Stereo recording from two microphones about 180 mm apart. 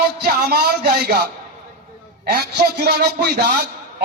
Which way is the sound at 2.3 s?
60° right (ahead or behind).